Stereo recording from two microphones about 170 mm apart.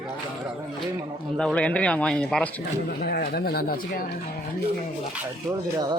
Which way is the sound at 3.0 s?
65° left (ahead or behind).